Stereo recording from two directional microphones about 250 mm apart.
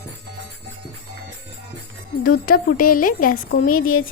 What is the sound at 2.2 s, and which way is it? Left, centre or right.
A woman's voice, left.